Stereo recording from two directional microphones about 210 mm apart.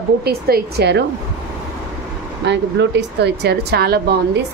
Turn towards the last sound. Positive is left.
turn(degrees=-50)  # may be behind; listen again after turning